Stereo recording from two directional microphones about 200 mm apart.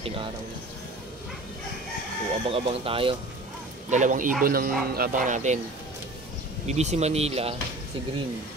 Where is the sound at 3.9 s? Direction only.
40° right (ahead or behind).